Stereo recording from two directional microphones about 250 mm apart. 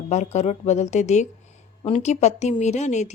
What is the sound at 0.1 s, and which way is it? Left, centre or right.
A woman's voice, left.